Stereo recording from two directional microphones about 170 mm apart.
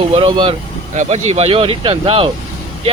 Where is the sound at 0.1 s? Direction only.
30° right (ahead or behind).